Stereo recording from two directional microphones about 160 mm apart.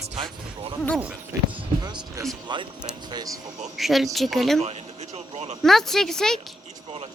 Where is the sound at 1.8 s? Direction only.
25° right (ahead or behind).